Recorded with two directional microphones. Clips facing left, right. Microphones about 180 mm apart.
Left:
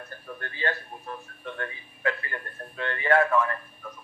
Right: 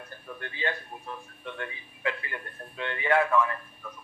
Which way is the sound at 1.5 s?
15° right (ahead or behind).